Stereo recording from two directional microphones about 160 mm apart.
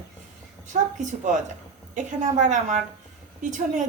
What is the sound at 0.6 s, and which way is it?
A woman's voice, 50° right (ahead or behind).